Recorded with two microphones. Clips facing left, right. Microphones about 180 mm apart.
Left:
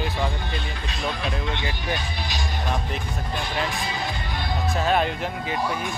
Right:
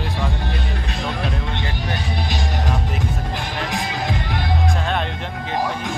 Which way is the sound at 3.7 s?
85° right.